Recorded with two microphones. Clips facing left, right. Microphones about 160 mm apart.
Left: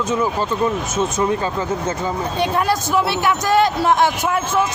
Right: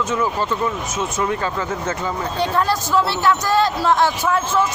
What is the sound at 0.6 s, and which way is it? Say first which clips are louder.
Speech: left 4 dB; 25° left (ahead or behind).